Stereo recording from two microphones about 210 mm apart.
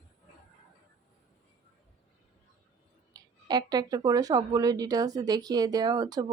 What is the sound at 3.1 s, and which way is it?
Speech, 20° right (ahead or behind).